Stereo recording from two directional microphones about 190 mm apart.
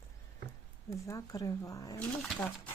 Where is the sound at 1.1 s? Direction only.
15° left (ahead or behind).